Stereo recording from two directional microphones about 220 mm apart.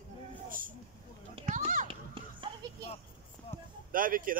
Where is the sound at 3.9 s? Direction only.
40° right (ahead or behind).